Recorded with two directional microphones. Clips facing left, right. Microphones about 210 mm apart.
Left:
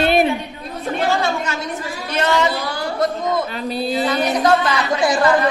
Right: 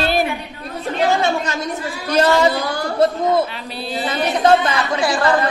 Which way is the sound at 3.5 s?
45° left (ahead or behind).